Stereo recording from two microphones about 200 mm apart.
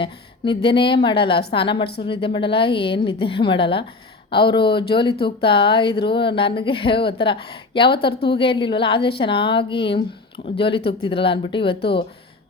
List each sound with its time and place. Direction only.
0.0 s a woman's voice: 25° left (ahead or behind)